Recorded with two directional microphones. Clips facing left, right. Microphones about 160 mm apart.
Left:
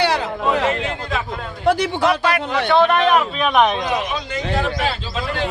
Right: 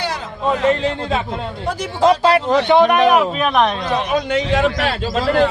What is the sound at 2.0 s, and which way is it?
Speech, 30° right (ahead or behind).